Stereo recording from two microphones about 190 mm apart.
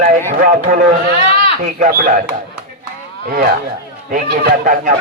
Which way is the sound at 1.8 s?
50° right (ahead or behind).